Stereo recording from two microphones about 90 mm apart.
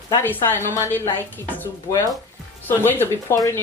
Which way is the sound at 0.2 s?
25° left (ahead or behind).